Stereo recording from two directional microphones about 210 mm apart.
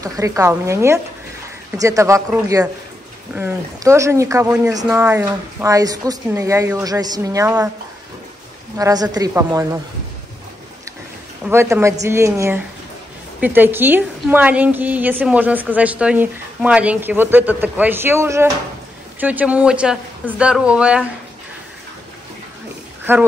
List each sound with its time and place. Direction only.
0.0 s a woman's voice: 15° right (ahead or behind)
8.7 s a woman's voice: 15° right (ahead or behind)
11.4 s a woman's voice: 10° right (ahead or behind)
23.1 s a woman's voice: 10° right (ahead or behind)